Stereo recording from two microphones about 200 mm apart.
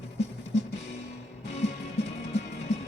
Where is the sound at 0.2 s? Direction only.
35° left (ahead or behind).